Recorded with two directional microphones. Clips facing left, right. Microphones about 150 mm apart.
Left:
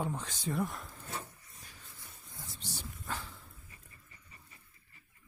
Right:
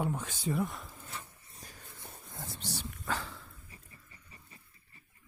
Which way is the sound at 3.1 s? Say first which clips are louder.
Right 5 dB; 90° right.